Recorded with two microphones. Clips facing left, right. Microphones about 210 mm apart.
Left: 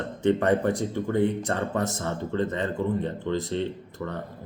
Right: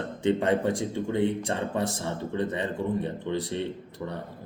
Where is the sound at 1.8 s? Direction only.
30° right (ahead or behind).